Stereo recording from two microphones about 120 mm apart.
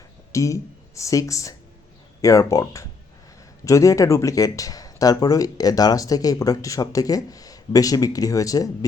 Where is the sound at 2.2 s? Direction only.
30° left (ahead or behind).